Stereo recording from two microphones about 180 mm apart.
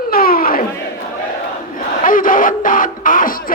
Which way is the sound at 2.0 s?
50° left (ahead or behind).